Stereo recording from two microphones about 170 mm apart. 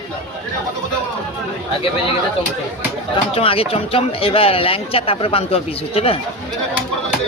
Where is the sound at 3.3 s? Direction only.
35° left (ahead or behind).